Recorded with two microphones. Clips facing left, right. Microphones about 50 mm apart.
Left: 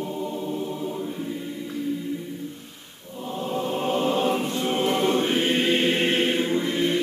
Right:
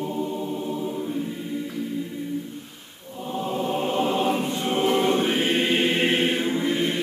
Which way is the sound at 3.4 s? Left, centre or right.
Centre.